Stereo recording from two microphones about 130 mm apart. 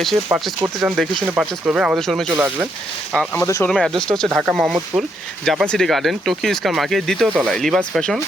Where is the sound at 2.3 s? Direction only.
10° right (ahead or behind).